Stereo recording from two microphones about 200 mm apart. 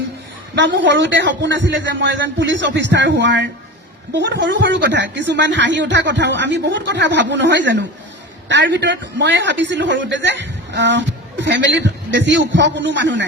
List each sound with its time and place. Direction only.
0.5 s a man's voice: 65° right (ahead or behind)